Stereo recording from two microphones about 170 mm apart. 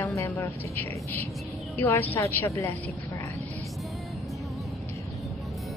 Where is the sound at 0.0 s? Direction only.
20° left (ahead or behind).